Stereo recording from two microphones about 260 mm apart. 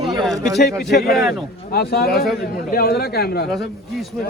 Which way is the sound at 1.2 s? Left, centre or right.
Centre.